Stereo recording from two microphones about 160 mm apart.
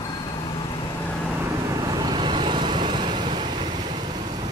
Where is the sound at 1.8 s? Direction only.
25° right (ahead or behind).